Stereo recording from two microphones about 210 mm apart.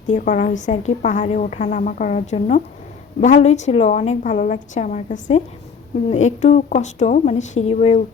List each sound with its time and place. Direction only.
0.1 s a woman's voice: 40° left (ahead or behind)